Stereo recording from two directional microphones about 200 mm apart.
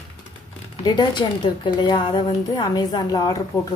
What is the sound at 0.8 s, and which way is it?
Speech, 20° left (ahead or behind).